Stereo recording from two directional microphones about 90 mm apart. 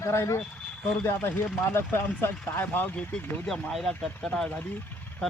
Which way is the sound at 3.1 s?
5° left (ahead or behind).